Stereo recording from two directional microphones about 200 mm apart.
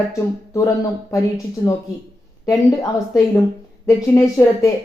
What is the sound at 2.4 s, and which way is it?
Speech, 15° left (ahead or behind).